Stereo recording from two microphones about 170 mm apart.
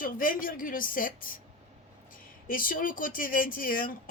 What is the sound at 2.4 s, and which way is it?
Speech, 55° left (ahead or behind).